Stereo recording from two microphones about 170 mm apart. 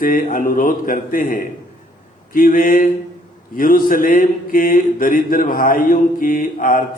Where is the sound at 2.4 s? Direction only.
55° left (ahead or behind).